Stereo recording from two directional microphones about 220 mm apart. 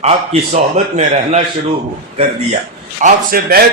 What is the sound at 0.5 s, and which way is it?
Mantra, 30° right (ahead or behind).